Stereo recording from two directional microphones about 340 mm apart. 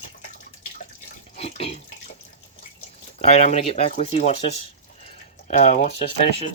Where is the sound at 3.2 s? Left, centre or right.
Centre.